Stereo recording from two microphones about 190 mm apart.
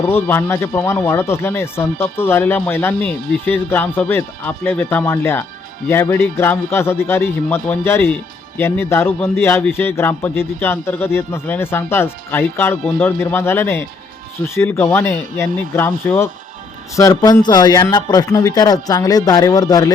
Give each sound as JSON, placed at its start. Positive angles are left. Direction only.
{"t": 0.1, "sound": "a man's voice", "side_deg": 10}